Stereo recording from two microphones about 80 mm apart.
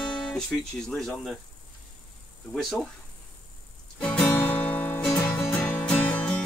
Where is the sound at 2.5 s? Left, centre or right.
Centre.